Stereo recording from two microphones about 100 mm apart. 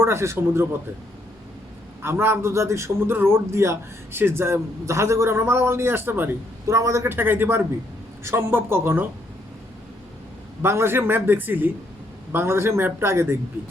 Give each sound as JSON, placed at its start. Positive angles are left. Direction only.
{"t": 0.0, "sound": "a man's voice", "side_deg": -25}
{"t": 2.0, "sound": "a man's voice", "side_deg": -25}
{"t": 6.7, "sound": "a man's voice", "side_deg": -30}
{"t": 10.6, "sound": "a man's voice", "side_deg": -25}